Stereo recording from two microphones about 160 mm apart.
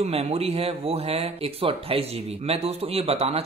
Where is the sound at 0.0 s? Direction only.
40° right (ahead or behind).